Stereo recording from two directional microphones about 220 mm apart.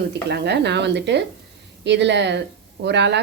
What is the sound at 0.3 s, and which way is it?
A woman's voice, 50° right (ahead or behind).